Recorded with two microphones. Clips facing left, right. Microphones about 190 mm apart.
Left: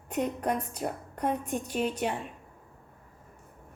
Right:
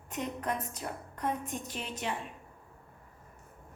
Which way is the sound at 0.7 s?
60° left (ahead or behind).